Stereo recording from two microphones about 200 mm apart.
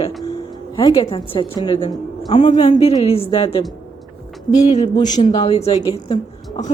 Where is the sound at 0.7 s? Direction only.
20° left (ahead or behind).